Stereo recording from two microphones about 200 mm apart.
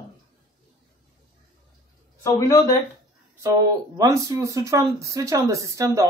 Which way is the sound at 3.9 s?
15° right (ahead or behind).